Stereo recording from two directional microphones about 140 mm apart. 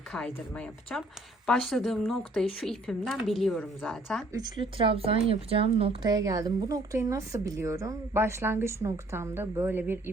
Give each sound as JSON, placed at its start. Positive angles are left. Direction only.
{"t": 0.1, "sound": "speech", "side_deg": 5}
{"t": 4.3, "sound": "speech", "side_deg": -30}
{"t": 4.6, "sound": "speech", "side_deg": -40}
{"t": 6.1, "sound": "speech", "side_deg": -25}